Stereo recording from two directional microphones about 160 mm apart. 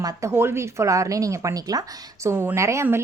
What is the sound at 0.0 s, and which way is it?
A woman's voice, 20° right (ahead or behind).